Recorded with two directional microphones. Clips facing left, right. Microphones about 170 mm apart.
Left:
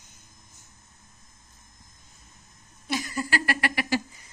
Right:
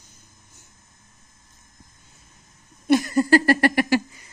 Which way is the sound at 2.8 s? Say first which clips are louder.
Right 12 dB; 55° right (ahead or behind).